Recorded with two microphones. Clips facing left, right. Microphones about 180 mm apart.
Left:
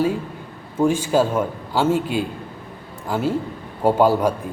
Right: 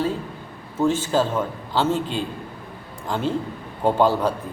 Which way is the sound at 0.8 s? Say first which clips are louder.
Left 3 dB; 10° left (ahead or behind).